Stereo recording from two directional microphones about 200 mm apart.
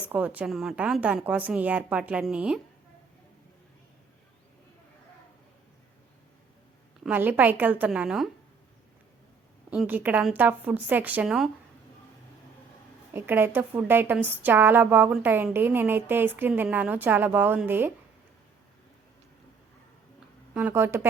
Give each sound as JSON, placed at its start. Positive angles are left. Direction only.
{"t": 0.0, "sound": "a woman's voice", "side_deg": -10}
{"t": 7.0, "sound": "a woman's voice", "side_deg": -10}
{"t": 9.6, "sound": "a woman's voice", "side_deg": -5}
{"t": 13.1, "sound": "a woman's voice", "side_deg": -10}
{"t": 20.5, "sound": "a woman's voice", "side_deg": -10}